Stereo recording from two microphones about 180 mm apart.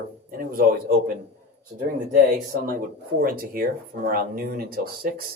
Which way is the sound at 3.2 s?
50° right (ahead or behind).